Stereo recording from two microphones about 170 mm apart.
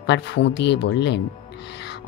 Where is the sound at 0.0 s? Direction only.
90° left.